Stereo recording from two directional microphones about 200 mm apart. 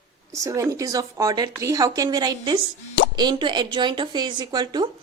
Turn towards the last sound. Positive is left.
turn(degrees=-20)  # may be behind; listen again after turning